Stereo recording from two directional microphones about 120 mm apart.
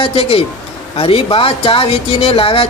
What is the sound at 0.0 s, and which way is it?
Speech, 50° left (ahead or behind).